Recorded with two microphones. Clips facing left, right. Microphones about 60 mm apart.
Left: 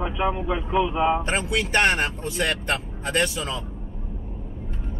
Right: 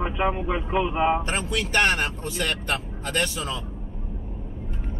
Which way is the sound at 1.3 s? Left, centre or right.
Left.